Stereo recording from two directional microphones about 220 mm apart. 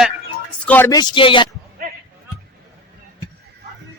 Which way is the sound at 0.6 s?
10° left (ahead or behind).